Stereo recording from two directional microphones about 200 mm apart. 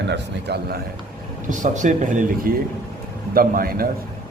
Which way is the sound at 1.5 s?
40° right (ahead or behind).